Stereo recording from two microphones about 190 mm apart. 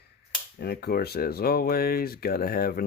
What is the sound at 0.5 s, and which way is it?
Speech, 55° left (ahead or behind).